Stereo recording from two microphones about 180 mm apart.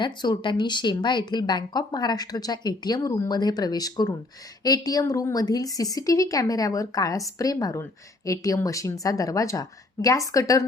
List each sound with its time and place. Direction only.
0.0 s speech: 25° left (ahead or behind)